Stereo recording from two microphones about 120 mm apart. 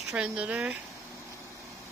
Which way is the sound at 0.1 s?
10° right (ahead or behind).